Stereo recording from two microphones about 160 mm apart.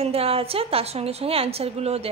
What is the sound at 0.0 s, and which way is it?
A woman's voice, 40° right (ahead or behind).